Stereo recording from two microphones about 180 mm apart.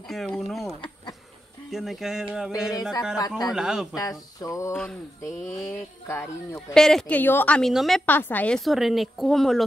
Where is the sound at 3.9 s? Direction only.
20° left (ahead or behind).